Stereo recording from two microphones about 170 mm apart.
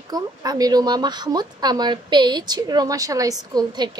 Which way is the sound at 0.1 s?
20° right (ahead or behind).